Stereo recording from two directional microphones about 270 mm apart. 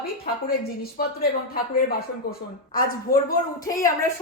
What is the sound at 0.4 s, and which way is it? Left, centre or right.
Speech, left.